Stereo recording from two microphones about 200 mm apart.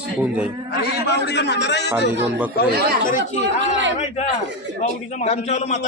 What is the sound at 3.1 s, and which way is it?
Speech, 35° left (ahead or behind).